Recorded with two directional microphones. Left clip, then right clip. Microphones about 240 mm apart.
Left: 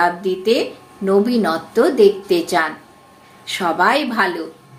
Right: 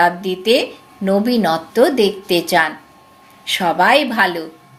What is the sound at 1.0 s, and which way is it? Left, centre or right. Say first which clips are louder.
Speech: even; right.